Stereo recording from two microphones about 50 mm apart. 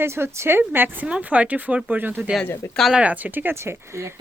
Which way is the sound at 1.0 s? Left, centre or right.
Right.